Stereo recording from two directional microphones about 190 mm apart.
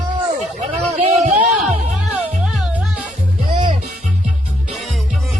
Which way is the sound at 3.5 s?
30° right (ahead or behind).